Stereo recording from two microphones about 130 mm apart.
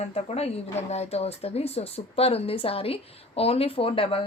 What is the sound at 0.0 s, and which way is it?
Speech, 55° left (ahead or behind).